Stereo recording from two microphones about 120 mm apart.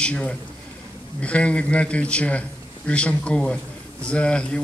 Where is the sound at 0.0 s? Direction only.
10° left (ahead or behind).